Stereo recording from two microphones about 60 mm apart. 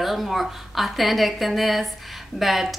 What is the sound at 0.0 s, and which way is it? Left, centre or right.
A woman's voice, centre.